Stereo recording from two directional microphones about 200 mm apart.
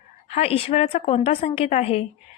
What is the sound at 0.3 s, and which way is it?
Speech, 30° left (ahead or behind).